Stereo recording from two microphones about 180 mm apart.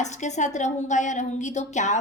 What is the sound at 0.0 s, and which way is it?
A woman's voice, 40° left (ahead or behind).